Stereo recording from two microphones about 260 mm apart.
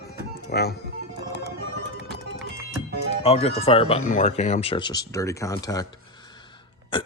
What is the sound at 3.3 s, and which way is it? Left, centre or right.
Speech, left.